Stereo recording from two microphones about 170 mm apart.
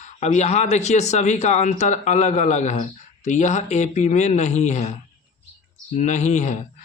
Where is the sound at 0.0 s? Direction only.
45° left (ahead or behind).